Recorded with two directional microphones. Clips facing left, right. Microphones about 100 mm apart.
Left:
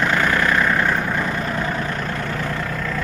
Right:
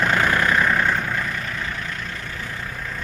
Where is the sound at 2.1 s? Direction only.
60° left (ahead or behind); by 3.0 s 85° left.